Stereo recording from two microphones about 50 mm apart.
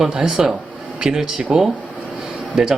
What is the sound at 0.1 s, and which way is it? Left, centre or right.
Speech, centre.